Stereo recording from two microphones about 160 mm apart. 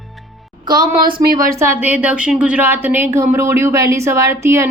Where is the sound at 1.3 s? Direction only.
20° right (ahead or behind).